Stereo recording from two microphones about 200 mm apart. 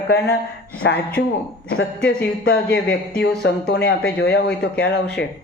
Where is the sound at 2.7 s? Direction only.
55° left (ahead or behind).